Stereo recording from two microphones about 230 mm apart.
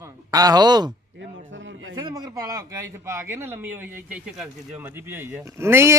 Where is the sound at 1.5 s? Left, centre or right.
Right.